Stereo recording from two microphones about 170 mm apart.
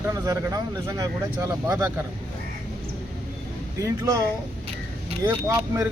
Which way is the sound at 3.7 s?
20° right (ahead or behind).